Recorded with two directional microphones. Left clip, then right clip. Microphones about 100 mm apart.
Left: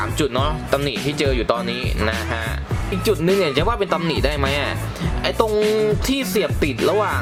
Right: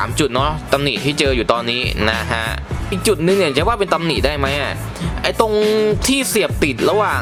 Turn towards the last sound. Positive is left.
turn(degrees=-10)  # may be behind; listen again after turning